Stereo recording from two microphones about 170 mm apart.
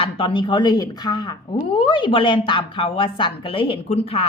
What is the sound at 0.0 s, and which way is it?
A woman's voice, 30° left (ahead or behind).